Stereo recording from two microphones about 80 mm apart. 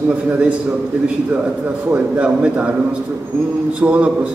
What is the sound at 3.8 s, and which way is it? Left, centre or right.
Speech, centre.